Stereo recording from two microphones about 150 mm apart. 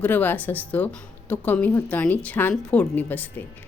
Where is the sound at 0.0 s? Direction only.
10° left (ahead or behind).